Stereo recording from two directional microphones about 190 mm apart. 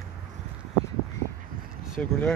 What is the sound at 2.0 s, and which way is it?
Speech, 5° left (ahead or behind).